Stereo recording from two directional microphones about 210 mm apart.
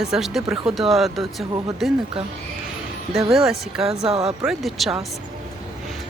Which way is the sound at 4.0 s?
30° right (ahead or behind).